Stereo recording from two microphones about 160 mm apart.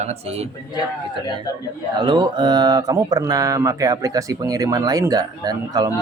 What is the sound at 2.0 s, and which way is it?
A woman's voice, 30° right (ahead or behind).